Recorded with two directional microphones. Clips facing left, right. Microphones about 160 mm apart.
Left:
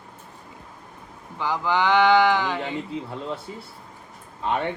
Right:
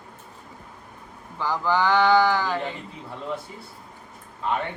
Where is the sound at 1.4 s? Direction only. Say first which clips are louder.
Even; 15° left (ahead or behind).